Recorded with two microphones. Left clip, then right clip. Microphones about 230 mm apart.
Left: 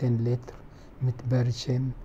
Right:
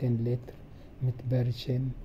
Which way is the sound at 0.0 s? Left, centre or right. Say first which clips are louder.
Left 3 dB; centre.